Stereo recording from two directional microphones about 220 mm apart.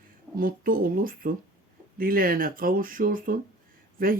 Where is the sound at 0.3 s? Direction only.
40° right (ahead or behind).